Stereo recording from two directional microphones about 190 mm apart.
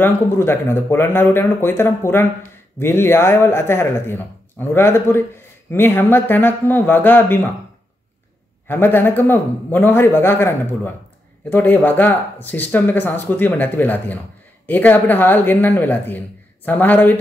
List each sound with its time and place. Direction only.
0.0 s speech: 10° left (ahead or behind)
8.6 s speech: 10° left (ahead or behind)